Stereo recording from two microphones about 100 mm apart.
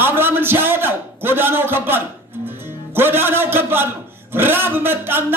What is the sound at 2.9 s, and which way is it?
A man's voice, 20° right (ahead or behind).